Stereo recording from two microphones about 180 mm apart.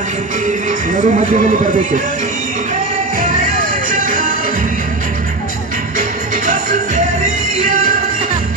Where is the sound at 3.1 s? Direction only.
50° right (ahead or behind).